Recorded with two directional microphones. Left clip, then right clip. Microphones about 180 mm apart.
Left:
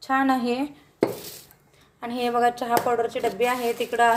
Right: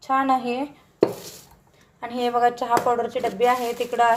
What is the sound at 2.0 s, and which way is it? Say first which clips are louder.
Speech: right 2 dB; centre (ahead or behind).